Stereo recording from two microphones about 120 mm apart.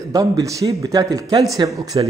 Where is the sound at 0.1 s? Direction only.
30° right (ahead or behind).